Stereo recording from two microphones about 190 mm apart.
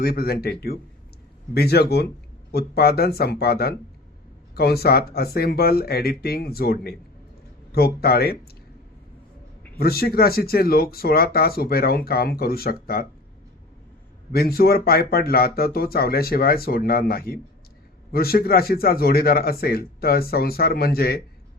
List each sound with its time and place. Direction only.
0.0 s speech: 55° left (ahead or behind)
9.7 s speech: 55° left (ahead or behind)
14.3 s speech: 50° left (ahead or behind)